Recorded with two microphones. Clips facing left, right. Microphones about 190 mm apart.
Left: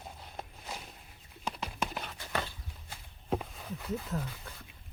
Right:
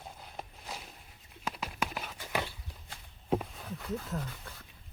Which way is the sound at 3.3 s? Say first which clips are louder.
Right 2 dB; centre (ahead or behind).